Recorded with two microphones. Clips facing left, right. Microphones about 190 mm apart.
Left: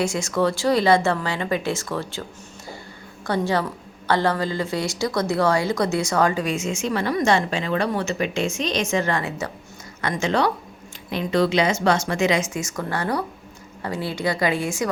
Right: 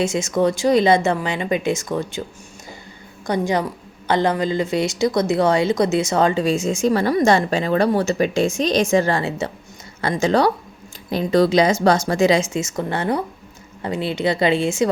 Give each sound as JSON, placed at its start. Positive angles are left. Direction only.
{"t": 0.0, "sound": "a woman's voice", "side_deg": -20}
{"t": 3.2, "sound": "a woman's voice", "side_deg": -15}